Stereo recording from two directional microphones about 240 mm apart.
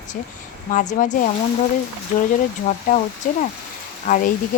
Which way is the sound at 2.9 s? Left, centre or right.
Left.